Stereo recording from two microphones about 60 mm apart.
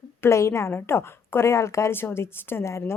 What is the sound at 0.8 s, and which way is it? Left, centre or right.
A woman's voice, left.